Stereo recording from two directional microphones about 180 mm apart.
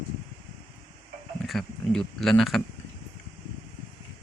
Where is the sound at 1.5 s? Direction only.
Centre (ahead or behind).